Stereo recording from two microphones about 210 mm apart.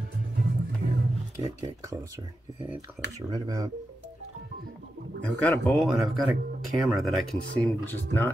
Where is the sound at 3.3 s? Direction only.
20° right (ahead or behind).